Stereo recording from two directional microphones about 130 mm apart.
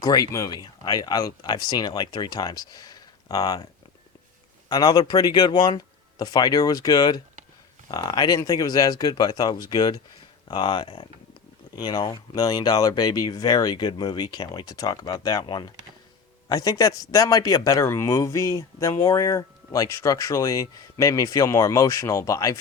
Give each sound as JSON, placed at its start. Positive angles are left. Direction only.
{"t": 0.0, "sound": "speech", "side_deg": 30}
{"t": 4.7, "sound": "speech", "side_deg": 30}